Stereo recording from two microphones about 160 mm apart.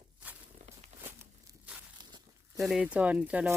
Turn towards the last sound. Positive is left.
turn(degrees=-10)  # may be behind; listen again after turning